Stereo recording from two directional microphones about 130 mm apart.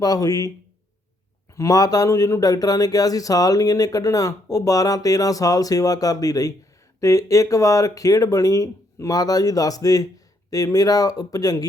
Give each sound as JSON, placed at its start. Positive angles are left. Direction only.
{"t": 0.0, "sound": "speech", "side_deg": 30}
{"t": 1.5, "sound": "speech", "side_deg": 25}